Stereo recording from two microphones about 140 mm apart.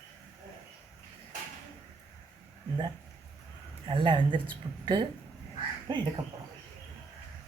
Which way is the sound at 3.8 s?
35° right (ahead or behind).